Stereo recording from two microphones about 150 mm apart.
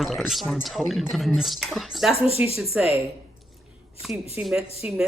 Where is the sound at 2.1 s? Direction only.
40° left (ahead or behind).